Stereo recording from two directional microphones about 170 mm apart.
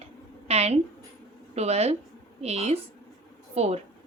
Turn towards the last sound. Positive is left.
turn(degrees=-40)  # may be behind; listen again after turning